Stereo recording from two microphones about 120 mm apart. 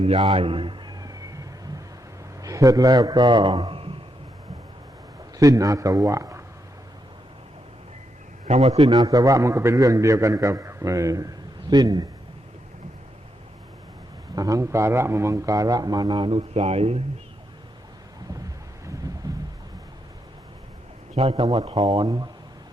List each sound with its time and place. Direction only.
0.0 s a sound: 55° right (ahead or behind); by 1.8 s 30° right (ahead or behind)
2.4 s a man's voice: 30° right (ahead or behind); by 3.9 s 50° right (ahead or behind)
5.4 s a man's voice: 30° right (ahead or behind)
8.4 s a man's voice: 65° right (ahead or behind)
8.8 s a man's voice: 30° right (ahead or behind)
14.3 s speech: 30° right (ahead or behind); by 17.0 s 60° right (ahead or behind)
21.3 s speech: 35° right (ahead or behind)